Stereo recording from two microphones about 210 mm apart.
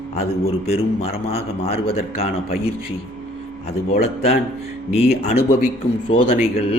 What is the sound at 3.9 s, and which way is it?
A man's voice, 30° left (ahead or behind).